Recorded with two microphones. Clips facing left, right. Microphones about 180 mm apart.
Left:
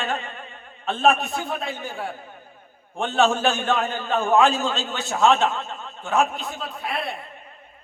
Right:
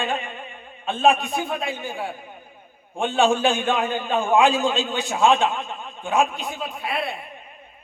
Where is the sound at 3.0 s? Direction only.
15° right (ahead or behind).